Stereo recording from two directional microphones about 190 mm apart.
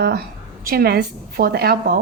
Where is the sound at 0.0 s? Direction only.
55° right (ahead or behind).